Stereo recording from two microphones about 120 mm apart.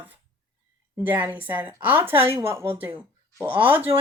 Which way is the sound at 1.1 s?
15° right (ahead or behind).